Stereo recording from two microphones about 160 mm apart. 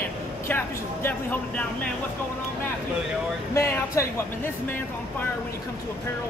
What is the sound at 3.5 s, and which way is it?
Speech, 20° left (ahead or behind).